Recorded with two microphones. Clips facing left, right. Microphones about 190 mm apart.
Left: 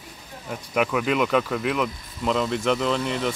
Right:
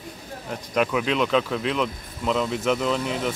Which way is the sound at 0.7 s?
5° left (ahead or behind).